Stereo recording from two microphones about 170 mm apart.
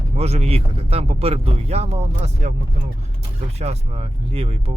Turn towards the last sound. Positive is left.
turn(degrees=-35)  # may be behind; listen again after turning